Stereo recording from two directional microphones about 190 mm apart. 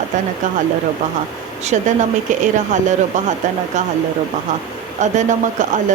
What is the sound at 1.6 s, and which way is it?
Speech, 40° right (ahead or behind).